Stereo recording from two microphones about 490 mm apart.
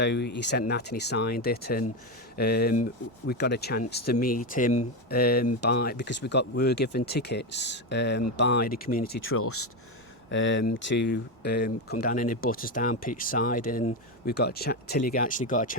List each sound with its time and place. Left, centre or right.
0.0 s speech: left